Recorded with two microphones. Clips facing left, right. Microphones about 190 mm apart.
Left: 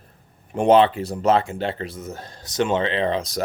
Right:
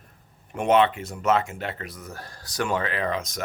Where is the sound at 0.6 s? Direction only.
30° left (ahead or behind).